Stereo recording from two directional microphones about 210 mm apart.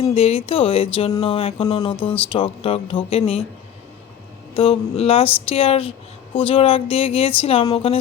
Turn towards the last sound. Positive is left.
turn(degrees=25)  # may be behind; listen again after turning